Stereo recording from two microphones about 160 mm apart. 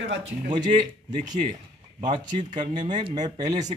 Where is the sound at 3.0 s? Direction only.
25° right (ahead or behind).